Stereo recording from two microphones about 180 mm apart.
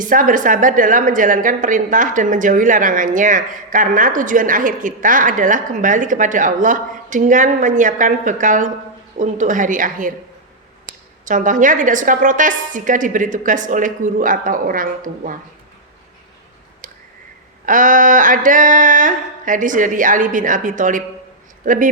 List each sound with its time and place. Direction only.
0.0 s a woman's voice: 50° right (ahead or behind)
16.8 s a sound: 50° right (ahead or behind)
17.7 s a woman's voice: 45° right (ahead or behind)